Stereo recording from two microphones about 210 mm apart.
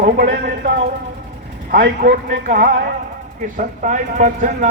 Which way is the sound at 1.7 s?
50° right (ahead or behind).